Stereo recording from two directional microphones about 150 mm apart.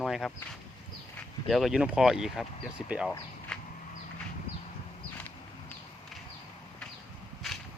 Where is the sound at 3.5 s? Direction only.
5° left (ahead or behind).